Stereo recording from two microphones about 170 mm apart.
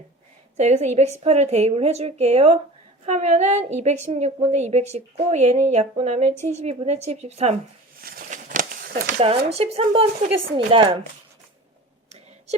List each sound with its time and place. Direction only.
0.5 s a woman's voice: 40° right (ahead or behind)
8.0 s a sound: 55° right (ahead or behind)
9.1 s a woman's voice: 35° right (ahead or behind)